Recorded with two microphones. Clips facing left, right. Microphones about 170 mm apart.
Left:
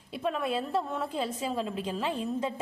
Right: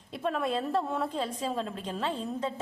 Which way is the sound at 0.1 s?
Centre (ahead or behind).